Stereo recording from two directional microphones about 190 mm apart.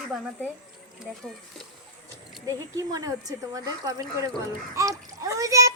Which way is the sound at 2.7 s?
20° right (ahead or behind).